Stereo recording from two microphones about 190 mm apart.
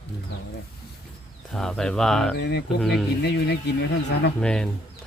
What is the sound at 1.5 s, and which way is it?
Speech, centre (ahead or behind).